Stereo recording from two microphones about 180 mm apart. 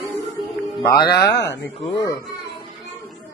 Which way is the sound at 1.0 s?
65° left (ahead or behind).